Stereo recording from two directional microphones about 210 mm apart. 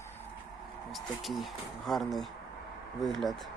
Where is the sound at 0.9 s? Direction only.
Centre (ahead or behind).